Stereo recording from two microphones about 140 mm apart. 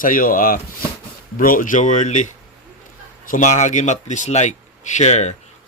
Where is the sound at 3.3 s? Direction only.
65° left (ahead or behind).